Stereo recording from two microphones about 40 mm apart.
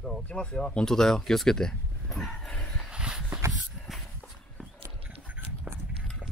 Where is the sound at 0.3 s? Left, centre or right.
Left.